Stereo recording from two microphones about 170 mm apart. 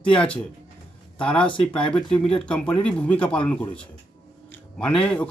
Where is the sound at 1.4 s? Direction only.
30° left (ahead or behind).